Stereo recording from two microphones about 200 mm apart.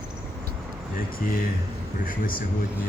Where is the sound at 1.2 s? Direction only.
45° left (ahead or behind).